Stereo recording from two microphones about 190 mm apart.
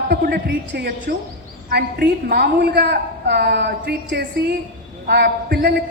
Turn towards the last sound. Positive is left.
turn(degrees=-55)  # may be behind; listen again after turning